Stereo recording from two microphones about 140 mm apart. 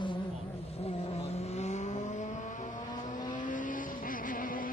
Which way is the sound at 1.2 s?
50° left (ahead or behind).